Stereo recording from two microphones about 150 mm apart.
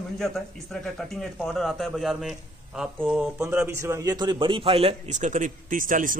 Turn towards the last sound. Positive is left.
turn(degrees=-65)  # may be behind; listen again after turning